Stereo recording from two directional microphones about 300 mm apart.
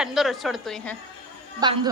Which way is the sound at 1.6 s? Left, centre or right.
Centre.